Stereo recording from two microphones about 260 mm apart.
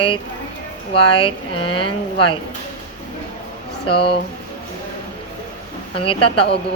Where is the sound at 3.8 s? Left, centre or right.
Centre.